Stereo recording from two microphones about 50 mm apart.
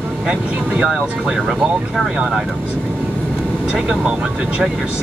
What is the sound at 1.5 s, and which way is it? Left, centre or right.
Speech, centre.